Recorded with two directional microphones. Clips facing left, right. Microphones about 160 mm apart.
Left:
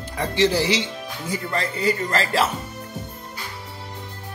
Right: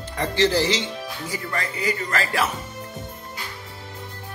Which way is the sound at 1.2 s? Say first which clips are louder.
Left 5 dB; 30° left (ahead or behind).